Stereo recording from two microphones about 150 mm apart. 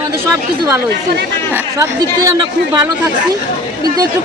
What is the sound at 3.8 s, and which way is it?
Speech, 25° right (ahead or behind).